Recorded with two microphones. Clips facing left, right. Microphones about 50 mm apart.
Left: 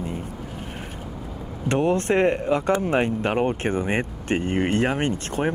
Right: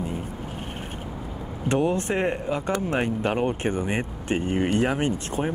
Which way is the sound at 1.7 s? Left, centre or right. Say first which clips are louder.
Left 3 dB; left.